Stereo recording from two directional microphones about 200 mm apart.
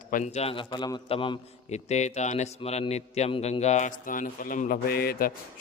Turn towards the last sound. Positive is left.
turn(degrees=50)  # may be behind; listen again after turning